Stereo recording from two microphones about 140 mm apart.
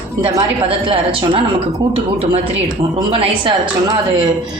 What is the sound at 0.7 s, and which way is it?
Speech, 40° right (ahead or behind).